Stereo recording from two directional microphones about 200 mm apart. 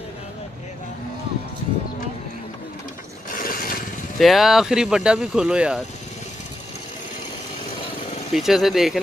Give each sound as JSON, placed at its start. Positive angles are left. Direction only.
{"t": 3.3, "sound": "a sound", "side_deg": 45}
{"t": 4.2, "sound": "speech", "side_deg": 0}
{"t": 8.3, "sound": "speech", "side_deg": 0}